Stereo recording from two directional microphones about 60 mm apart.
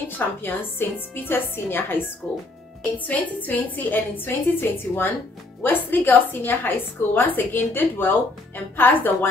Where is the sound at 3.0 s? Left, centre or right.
Left.